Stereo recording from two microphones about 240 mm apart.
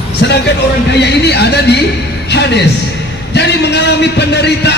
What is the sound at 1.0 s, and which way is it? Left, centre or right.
Speech, left.